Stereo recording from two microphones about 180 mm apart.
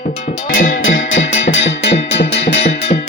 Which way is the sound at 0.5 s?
50° left (ahead or behind).